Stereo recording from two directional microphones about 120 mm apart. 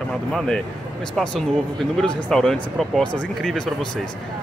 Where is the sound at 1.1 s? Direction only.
5° left (ahead or behind).